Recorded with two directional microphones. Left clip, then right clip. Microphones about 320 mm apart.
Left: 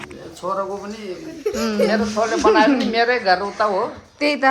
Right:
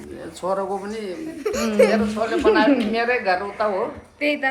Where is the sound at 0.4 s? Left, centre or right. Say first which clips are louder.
Even; centre.